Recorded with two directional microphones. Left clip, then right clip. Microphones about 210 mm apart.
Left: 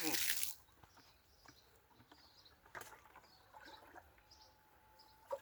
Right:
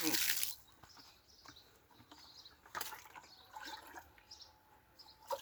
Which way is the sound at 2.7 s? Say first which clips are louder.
Right 8 dB; 50° right (ahead or behind).